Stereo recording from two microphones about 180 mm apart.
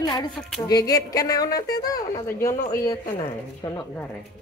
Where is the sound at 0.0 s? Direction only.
20° left (ahead or behind).